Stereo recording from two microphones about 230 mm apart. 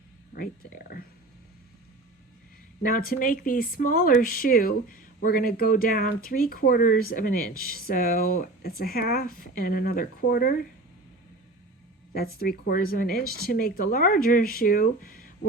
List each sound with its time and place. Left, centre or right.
0.3 s speech: left
2.8 s speech: left
12.1 s speech: left